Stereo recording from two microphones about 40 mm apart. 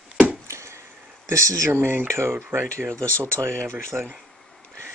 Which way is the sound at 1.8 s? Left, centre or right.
Right.